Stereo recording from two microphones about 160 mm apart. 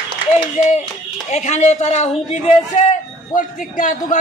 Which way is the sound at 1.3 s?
45° left (ahead or behind).